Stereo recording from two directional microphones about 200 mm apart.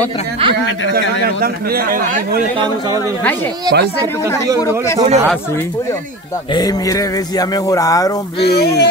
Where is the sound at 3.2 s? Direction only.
10° left (ahead or behind).